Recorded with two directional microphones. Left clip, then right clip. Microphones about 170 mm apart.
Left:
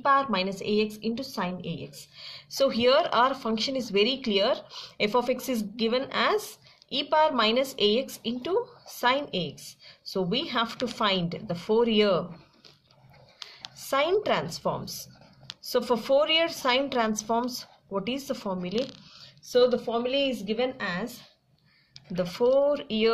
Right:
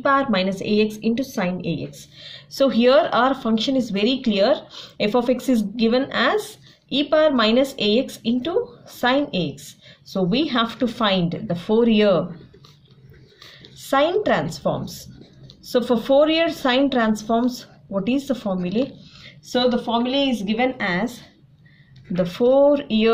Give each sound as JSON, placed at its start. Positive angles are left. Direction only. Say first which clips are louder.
{"t": 0.0, "sound": "speech", "louder": "right 5 dB", "side_deg": 30}
{"t": 13.7, "sound": "speech", "louder": "right 6 dB", "side_deg": 40}
{"t": 22.1, "sound": "speech", "louder": "right 6 dB", "side_deg": 40}